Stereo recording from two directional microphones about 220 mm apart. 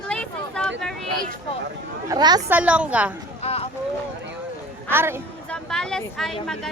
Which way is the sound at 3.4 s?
25° left (ahead or behind).